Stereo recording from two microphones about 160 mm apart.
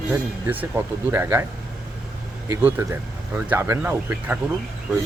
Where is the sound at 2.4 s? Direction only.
20° right (ahead or behind).